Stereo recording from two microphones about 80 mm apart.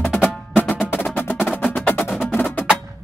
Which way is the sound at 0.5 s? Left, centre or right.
Centre.